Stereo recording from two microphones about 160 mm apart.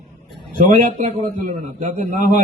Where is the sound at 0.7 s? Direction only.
45° right (ahead or behind).